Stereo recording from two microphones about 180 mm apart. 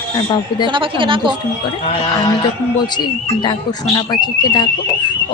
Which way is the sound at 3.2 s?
25° left (ahead or behind).